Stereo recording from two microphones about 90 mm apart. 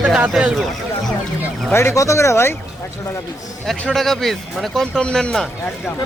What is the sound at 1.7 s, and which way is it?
Speech, 30° left (ahead or behind).